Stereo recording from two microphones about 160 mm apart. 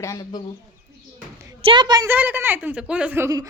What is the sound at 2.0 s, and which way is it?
A woman's voice, 10° right (ahead or behind).